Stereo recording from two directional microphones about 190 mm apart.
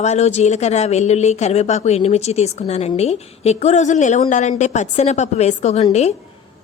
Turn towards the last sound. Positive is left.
turn(degrees=35)  # may be behind; listen again after turning